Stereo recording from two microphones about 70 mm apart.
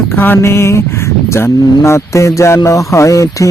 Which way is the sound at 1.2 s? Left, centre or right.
Left.